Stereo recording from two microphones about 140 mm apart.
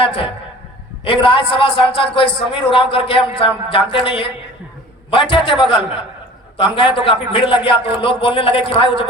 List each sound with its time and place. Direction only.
0.0 s a man's voice: 40° left (ahead or behind)
5.3 s a man's voice: 40° left (ahead or behind)